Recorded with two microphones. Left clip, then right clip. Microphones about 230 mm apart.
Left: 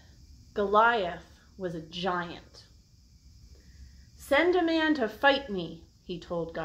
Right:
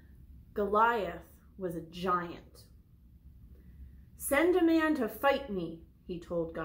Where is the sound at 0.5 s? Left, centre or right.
Centre.